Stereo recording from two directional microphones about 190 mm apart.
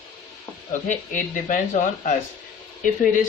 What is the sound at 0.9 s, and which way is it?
Speech, 40° left (ahead or behind).